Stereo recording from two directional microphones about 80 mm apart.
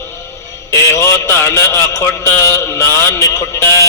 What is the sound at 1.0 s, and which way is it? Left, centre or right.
Music, left.